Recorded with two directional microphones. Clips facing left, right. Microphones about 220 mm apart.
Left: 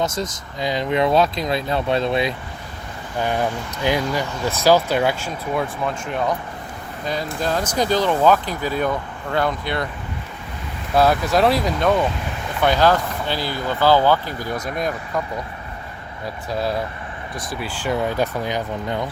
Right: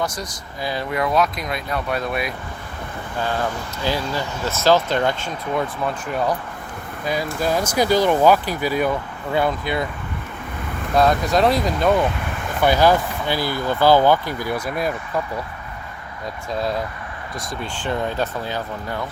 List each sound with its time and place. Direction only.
0.0 s speech: 25° left (ahead or behind); by 9.8 s 5° right (ahead or behind)
10.9 s speech: 5° left (ahead or behind)
16.5 s speech: 5° left (ahead or behind)